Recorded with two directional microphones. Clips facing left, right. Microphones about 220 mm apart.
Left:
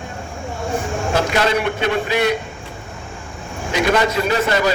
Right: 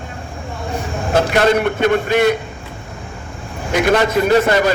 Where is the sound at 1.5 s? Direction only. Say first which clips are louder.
Right 4 dB; 45° right (ahead or behind).